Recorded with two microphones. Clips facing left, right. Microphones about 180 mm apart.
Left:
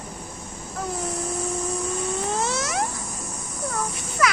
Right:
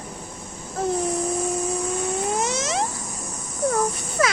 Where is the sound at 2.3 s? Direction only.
20° right (ahead or behind).